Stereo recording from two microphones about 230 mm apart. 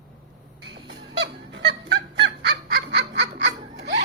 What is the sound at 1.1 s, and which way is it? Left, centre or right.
Honk, right.